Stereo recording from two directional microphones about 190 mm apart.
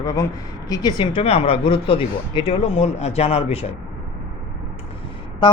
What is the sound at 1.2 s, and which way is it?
Speech, 30° left (ahead or behind).